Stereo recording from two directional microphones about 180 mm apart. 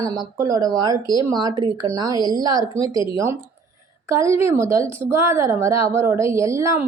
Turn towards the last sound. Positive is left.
turn(degrees=-15)  # may be behind; listen again after turning